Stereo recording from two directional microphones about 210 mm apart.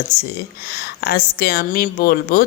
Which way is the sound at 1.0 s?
50° left (ahead or behind).